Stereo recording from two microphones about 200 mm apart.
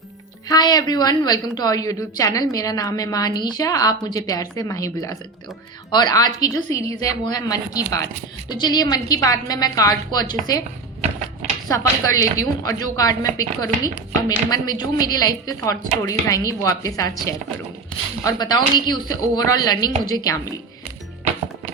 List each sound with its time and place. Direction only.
0.4 s a woman's voice: 20° left (ahead or behind)
11.7 s a woman's voice: 15° left (ahead or behind)